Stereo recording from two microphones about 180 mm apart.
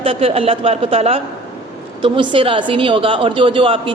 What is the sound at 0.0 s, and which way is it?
A woman's voice, 30° right (ahead or behind).